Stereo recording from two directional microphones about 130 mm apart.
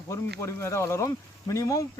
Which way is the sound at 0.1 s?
20° left (ahead or behind).